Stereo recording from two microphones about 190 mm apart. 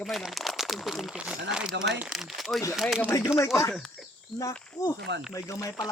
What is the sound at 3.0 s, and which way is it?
Speech, 10° left (ahead or behind).